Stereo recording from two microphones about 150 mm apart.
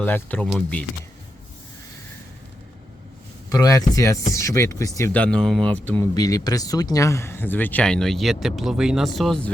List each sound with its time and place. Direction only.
0.0 s speech: 10° left (ahead or behind)
3.5 s speech: 25° left (ahead or behind)
5.1 s speech: 5° left (ahead or behind)
6.1 s speech: 25° left (ahead or behind); by 9.5 s centre (ahead or behind)